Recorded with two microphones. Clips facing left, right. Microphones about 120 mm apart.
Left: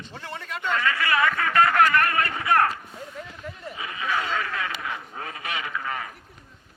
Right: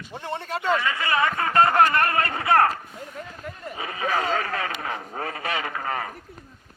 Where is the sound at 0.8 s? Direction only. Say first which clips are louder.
Even; 25° right (ahead or behind); by 6.2 s 45° right (ahead or behind).